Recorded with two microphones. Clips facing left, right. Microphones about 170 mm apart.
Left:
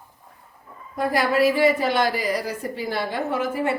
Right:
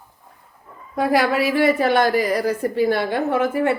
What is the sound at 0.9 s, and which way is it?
A woman's voice, 75° right (ahead or behind).